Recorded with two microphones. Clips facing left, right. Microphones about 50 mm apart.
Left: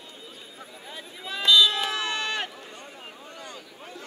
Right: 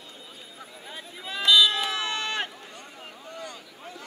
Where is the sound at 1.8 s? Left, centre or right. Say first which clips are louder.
Left 1 dB; left.